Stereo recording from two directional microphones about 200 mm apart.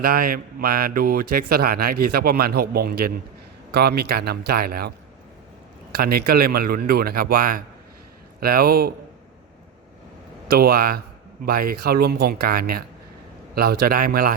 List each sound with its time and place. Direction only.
0.0 s speech: 45° right (ahead or behind)
5.9 s speech: 50° right (ahead or behind)
10.5 s speech: 50° right (ahead or behind)